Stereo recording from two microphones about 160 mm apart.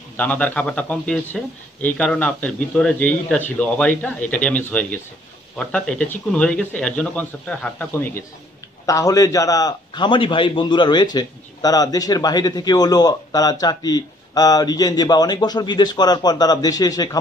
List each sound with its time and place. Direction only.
0.2 s speech: 10° left (ahead or behind)
8.8 s a man's voice: 20° left (ahead or behind)